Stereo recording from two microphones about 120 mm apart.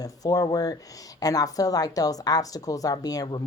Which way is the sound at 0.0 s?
30° left (ahead or behind).